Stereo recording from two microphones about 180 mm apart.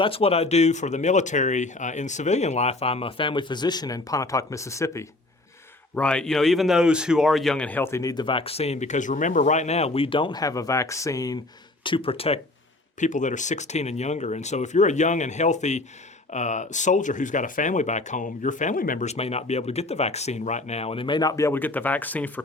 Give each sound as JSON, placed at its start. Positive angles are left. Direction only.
{"t": 0.0, "sound": "speech", "side_deg": 30}
{"t": 13.0, "sound": "speech", "side_deg": 45}